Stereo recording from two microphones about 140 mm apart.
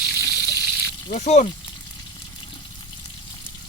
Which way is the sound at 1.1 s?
55° left (ahead or behind).